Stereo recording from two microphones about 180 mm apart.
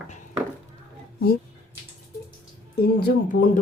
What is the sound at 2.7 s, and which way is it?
Speech, 60° left (ahead or behind).